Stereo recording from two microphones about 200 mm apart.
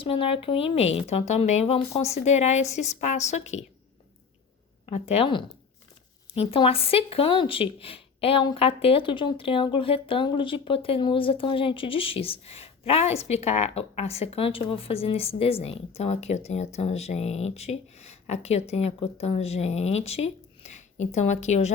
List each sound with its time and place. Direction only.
0.0 s speech: 25° left (ahead or behind)
4.9 s speech: 30° left (ahead or behind)